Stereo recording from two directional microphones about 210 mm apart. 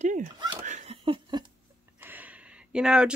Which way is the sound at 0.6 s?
30° right (ahead or behind).